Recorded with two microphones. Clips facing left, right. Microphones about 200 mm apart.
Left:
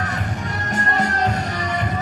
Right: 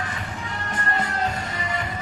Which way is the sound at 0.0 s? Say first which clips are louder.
Left 5 dB; 40° left (ahead or behind).